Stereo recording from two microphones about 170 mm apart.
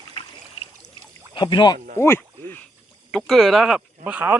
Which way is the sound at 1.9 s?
15° left (ahead or behind).